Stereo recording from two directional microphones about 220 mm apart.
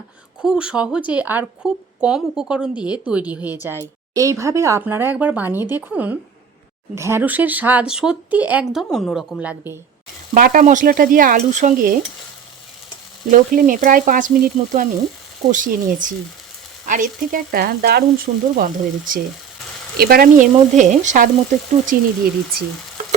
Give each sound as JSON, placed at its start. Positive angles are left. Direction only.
{"t": 0.4, "sound": "speech", "side_deg": -5}
{"t": 10.3, "sound": "speech", "side_deg": -40}
{"t": 13.3, "sound": "speech", "side_deg": -40}